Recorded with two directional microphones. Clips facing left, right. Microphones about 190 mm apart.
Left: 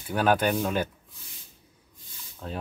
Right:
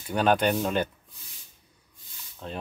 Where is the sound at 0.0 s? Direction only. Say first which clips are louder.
Right 1 dB; 5° left (ahead or behind).